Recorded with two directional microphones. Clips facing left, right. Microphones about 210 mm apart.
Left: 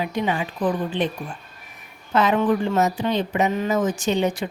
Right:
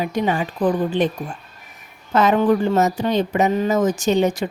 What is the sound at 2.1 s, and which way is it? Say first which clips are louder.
Speech: right 3 dB; 40° right (ahead or behind).